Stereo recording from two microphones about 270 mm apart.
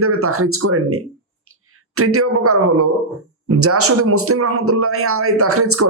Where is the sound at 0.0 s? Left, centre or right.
Right.